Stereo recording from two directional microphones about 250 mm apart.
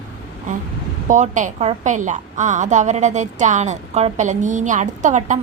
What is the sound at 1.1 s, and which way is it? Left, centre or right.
A woman's voice, right.